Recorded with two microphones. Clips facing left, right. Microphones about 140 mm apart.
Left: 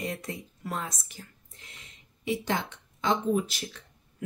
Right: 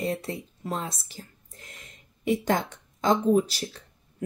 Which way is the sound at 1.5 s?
45° right (ahead or behind).